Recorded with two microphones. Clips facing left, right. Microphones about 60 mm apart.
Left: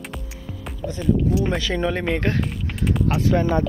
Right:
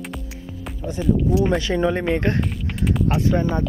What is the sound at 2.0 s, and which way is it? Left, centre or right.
Music, centre.